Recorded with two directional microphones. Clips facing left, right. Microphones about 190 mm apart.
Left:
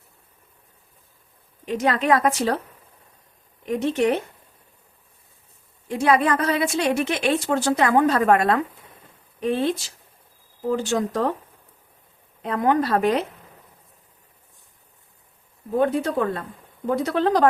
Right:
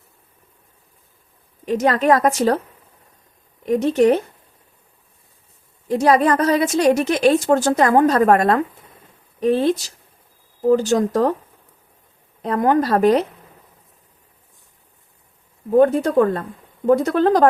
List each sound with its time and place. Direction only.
1.6 s a woman's voice: 40° right (ahead or behind)
3.7 s a woman's voice: 40° right (ahead or behind)
5.9 s a woman's voice: 40° right (ahead or behind)
12.4 s a woman's voice: 40° right (ahead or behind)
15.8 s a woman's voice: 45° right (ahead or behind)